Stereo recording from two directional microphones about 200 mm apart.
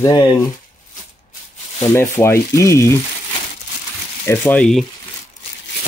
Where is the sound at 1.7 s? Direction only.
15° left (ahead or behind).